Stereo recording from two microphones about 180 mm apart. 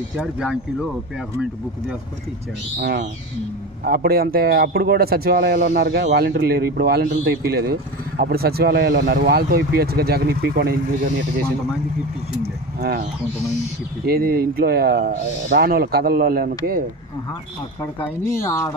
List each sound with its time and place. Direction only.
0.2 s speech: 5° right (ahead or behind)
3.8 s speech: 55° right (ahead or behind)
12.8 s speech: 60° right (ahead or behind)
17.9 s speech: 15° left (ahead or behind)